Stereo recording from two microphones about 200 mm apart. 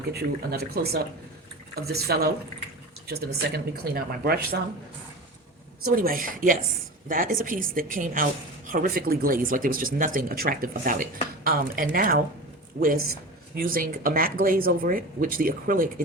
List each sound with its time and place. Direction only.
0.1 s a woman's voice: 50° right (ahead or behind)
5.8 s a woman's voice: 45° right (ahead or behind)
13.6 s a woman's voice: 45° right (ahead or behind)